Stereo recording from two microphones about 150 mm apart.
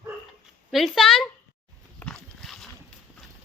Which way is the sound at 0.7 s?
Centre (ahead or behind).